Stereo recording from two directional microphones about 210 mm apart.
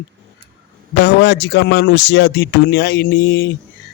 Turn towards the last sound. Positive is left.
turn(degrees=55)  # may be behind; listen again after turning